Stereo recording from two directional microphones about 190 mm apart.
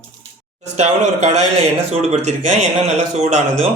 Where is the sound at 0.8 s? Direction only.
35° right (ahead or behind).